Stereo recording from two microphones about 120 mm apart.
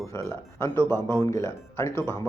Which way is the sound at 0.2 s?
25° left (ahead or behind).